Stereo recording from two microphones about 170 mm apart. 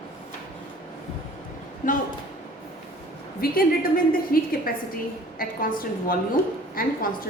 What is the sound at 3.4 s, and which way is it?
A woman's voice, 60° left (ahead or behind).